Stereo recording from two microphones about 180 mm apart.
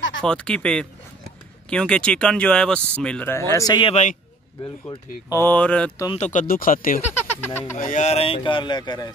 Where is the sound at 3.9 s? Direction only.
40° left (ahead or behind).